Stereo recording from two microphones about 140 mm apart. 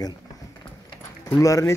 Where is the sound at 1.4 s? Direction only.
20° left (ahead or behind).